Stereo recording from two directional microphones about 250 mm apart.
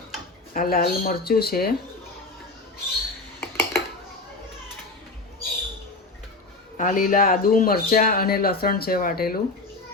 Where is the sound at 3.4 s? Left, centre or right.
Centre.